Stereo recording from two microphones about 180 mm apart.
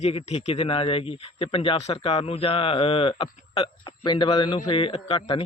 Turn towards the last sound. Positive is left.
turn(degrees=35)  # may be behind; listen again after turning